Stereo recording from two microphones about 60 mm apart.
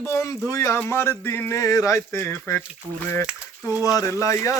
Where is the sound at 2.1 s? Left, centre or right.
Left.